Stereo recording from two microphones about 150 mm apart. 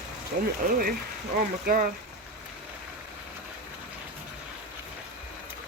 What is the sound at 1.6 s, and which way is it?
Speech, 70° right (ahead or behind).